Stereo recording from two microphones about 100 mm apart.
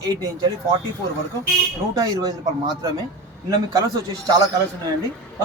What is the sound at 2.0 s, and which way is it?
Speech, 40° right (ahead or behind).